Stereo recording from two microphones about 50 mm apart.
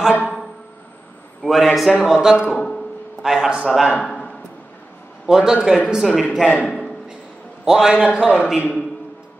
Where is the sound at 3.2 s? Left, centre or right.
Centre.